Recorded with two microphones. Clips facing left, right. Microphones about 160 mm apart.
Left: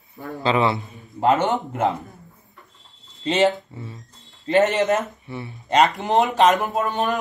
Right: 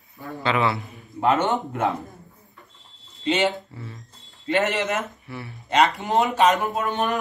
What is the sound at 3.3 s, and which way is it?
Speech, 40° left (ahead or behind).